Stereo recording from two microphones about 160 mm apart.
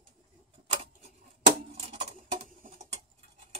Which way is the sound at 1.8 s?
40° right (ahead or behind).